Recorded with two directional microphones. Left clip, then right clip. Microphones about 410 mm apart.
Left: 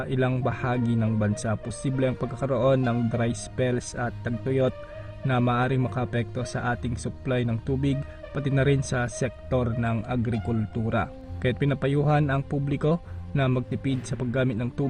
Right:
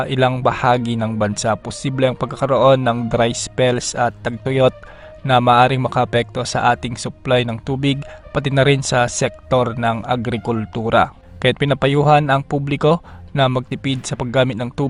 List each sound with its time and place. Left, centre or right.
0.0 s speech: centre